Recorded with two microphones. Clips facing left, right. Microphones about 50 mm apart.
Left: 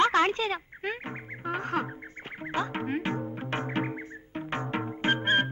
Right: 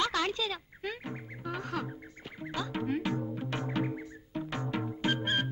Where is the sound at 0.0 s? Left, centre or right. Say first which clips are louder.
Left 7 dB; left.